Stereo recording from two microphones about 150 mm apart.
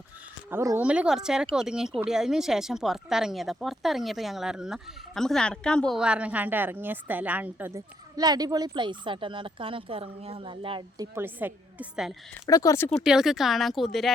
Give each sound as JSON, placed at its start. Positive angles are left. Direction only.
{"t": 0.5, "sound": "a woman's voice", "side_deg": -20}
{"t": 0.8, "sound": "speech", "side_deg": -10}
{"t": 6.0, "sound": "a woman's voice", "side_deg": -5}
{"t": 12.5, "sound": "speech", "side_deg": 20}
{"t": 13.0, "sound": "speech", "side_deg": -5}